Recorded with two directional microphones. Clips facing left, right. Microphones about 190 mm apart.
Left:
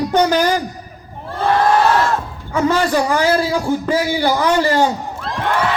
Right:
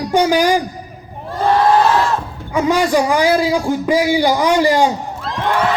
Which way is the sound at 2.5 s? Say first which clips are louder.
Right 1 dB; 15° right (ahead or behind).